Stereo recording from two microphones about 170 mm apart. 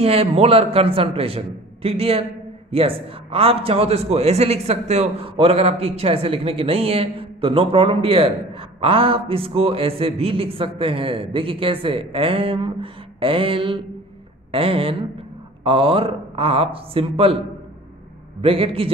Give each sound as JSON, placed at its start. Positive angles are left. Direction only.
{"t": 0.0, "sound": "a man's voice", "side_deg": -35}
{"t": 18.4, "sound": "a man's voice", "side_deg": -35}